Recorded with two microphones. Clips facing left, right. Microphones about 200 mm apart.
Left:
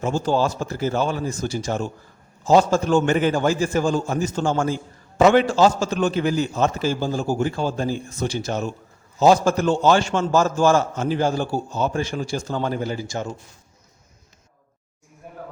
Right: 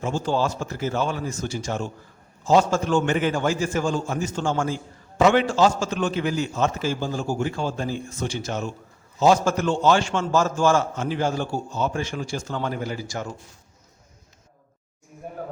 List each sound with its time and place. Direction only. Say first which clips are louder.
0.0 s a man's voice: left 3 dB; 40° left (ahead or behind); by 13.3 s 25° left (ahead or behind)